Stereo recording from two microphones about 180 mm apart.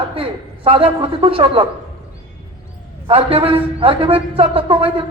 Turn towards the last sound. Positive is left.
turn(degrees=-30)  # may be behind; listen again after turning